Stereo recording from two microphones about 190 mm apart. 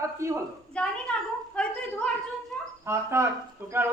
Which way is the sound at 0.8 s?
5° left (ahead or behind).